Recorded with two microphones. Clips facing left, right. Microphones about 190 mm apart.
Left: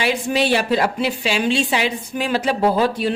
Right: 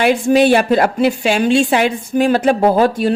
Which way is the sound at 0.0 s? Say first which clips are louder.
Right 8 dB; 50° right (ahead or behind).